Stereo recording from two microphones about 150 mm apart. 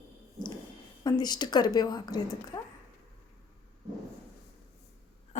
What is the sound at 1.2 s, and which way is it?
Speech, 25° left (ahead or behind).